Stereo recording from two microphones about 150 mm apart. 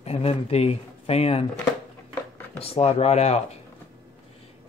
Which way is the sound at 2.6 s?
40° left (ahead or behind).